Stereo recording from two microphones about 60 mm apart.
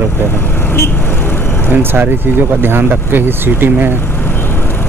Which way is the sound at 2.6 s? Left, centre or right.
Right.